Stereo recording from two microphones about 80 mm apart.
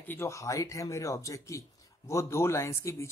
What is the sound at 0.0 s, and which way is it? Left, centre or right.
Speech, left.